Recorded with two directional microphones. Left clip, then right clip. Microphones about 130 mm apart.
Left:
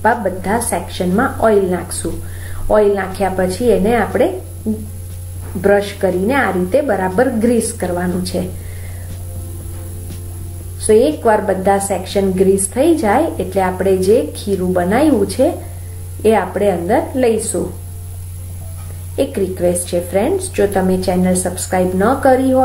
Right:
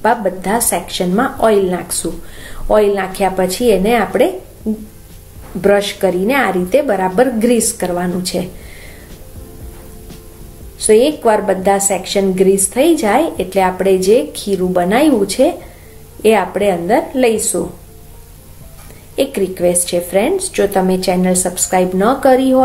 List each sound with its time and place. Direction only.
0.0 s a woman's voice: 25° right (ahead or behind)
5.6 s a woman's voice: 20° right (ahead or behind)
11.2 s a woman's voice: 20° right (ahead or behind)
19.1 s a woman's voice: 20° right (ahead or behind)